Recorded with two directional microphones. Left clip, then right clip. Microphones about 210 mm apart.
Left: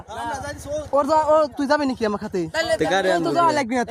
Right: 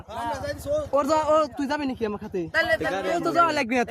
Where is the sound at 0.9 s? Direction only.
10° left (ahead or behind); by 2.5 s 35° left (ahead or behind).